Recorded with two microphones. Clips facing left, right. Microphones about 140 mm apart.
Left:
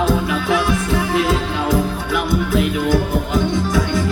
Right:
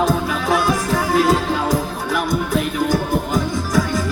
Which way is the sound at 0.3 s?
35° right (ahead or behind).